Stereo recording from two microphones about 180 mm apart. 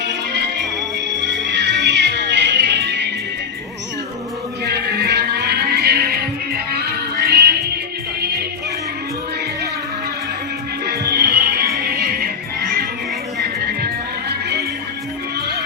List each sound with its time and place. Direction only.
0.0 s music: 75° right (ahead or behind)
4.6 s music: 65° right (ahead or behind)
10.8 s music: 65° right (ahead or behind)
13.7 s music: 65° right (ahead or behind)